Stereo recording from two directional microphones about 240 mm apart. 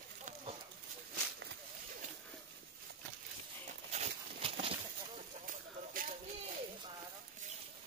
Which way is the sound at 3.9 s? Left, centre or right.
Right.